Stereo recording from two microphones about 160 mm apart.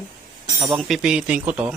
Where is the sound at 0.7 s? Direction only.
Centre (ahead or behind).